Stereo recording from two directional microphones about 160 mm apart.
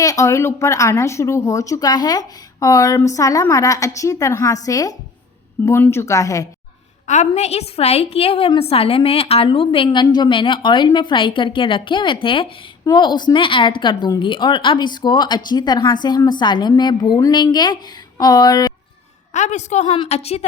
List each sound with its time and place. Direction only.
0.0 s speech: 20° left (ahead or behind)
7.1 s a woman's voice: 45° left (ahead or behind); by 18.7 s 25° left (ahead or behind)
19.3 s a woman's voice: 50° left (ahead or behind)